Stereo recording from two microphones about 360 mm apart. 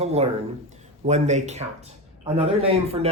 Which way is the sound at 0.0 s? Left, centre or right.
Centre.